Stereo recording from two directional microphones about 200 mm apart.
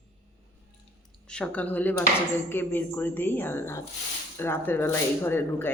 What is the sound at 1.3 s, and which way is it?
Speech, 5° left (ahead or behind).